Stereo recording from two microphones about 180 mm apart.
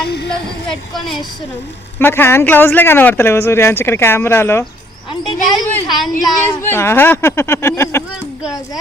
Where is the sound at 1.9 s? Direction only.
10° left (ahead or behind).